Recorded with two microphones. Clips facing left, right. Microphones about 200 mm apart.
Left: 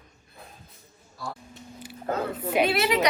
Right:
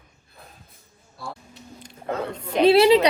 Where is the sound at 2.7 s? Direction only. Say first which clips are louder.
Right 11 dB; 30° right (ahead or behind).